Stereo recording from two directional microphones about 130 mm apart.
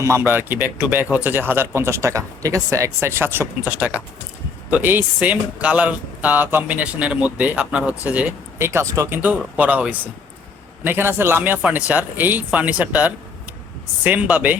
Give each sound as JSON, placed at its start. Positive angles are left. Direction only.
{"t": 0.0, "sound": "speech", "side_deg": -20}